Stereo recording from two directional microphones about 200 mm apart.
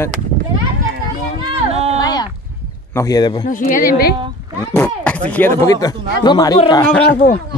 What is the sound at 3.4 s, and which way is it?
Speech, 40° left (ahead or behind).